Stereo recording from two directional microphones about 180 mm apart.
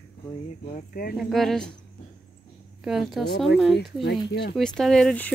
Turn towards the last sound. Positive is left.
turn(degrees=5)  # may be behind; listen again after turning